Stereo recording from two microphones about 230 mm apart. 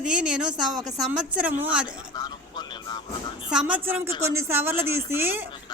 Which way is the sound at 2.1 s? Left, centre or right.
Centre.